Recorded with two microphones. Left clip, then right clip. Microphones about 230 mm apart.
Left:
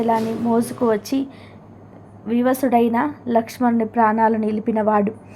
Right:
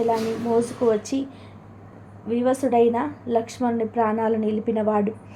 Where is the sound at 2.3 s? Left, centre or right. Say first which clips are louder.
Left 3 dB; centre.